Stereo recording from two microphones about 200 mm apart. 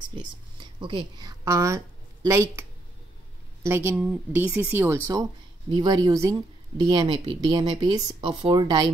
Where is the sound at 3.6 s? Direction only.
10° right (ahead or behind).